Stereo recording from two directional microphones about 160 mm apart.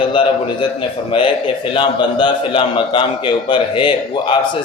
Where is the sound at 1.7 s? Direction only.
30° left (ahead or behind).